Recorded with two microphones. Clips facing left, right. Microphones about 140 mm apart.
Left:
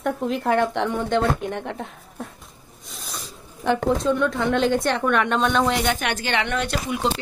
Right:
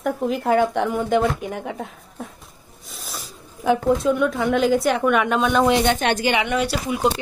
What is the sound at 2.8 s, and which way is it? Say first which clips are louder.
Snake: right 1 dB; centre (ahead or behind).